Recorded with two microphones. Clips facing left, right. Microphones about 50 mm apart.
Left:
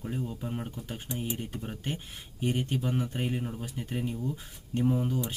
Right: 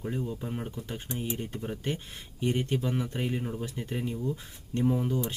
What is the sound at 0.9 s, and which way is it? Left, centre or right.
Speech, centre.